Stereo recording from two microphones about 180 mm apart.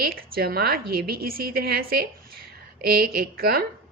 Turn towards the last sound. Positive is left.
turn(degrees=-55)  # may be behind; listen again after turning